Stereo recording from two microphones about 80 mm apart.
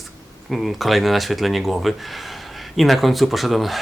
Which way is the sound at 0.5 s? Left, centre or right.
Centre.